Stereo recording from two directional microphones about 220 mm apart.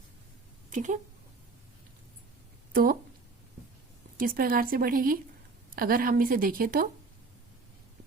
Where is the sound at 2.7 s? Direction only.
40° right (ahead or behind).